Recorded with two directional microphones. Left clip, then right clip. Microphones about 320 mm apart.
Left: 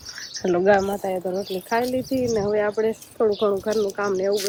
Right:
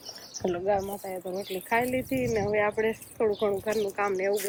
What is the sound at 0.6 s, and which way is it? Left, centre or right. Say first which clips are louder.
Speech: left 11 dB; left.